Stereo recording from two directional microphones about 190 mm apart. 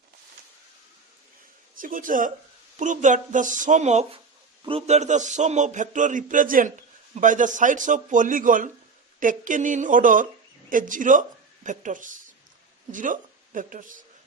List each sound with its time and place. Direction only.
1.8 s a man's voice: 45° right (ahead or behind)